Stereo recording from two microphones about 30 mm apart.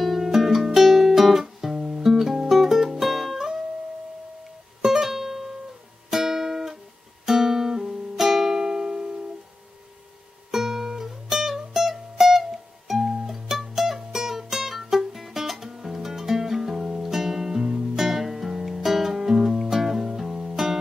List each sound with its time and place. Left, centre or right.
0.0 s music: centre
0.8 s guitar: centre
2.0 s music: centre
4.8 s music: centre
10.5 s music: centre